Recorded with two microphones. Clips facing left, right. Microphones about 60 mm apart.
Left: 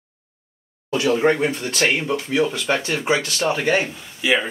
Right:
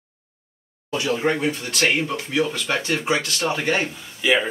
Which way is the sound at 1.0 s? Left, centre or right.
Left.